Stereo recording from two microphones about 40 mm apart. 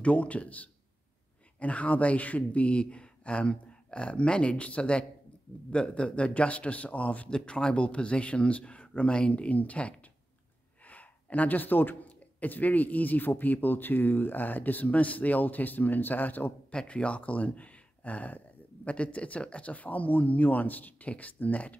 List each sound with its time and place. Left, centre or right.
0.0 s speech: left
7.2 s speech: left
16.8 s speech: left